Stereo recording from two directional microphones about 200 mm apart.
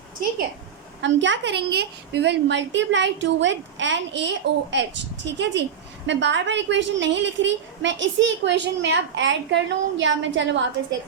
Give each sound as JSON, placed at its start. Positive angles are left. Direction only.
{"t": 1.0, "sound": "a woman's voice", "side_deg": -65}